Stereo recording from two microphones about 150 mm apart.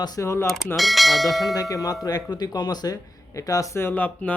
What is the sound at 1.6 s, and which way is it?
Speech, 25° left (ahead or behind).